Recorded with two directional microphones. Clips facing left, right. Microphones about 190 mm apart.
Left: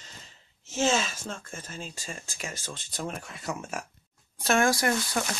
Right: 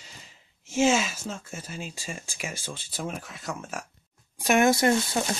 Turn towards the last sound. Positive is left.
turn(degrees=-25)  # may be behind; listen again after turning